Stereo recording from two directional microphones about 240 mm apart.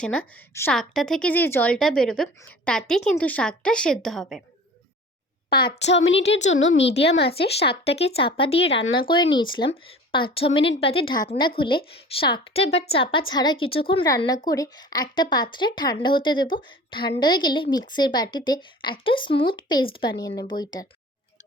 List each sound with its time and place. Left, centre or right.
0.0 s a woman's voice: centre
5.5 s a child's voice: left
7.9 s a woman's voice: left